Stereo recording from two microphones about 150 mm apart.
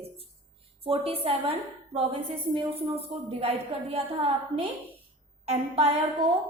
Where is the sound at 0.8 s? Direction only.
40° right (ahead or behind).